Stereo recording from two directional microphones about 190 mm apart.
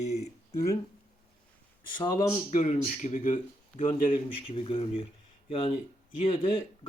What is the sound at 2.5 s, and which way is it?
Speech, 40° left (ahead or behind).